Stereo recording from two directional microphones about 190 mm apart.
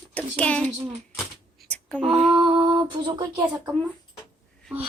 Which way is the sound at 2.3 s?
25° right (ahead or behind).